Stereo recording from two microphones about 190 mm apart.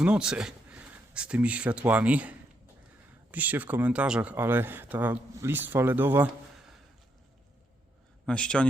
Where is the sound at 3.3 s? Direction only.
10° right (ahead or behind).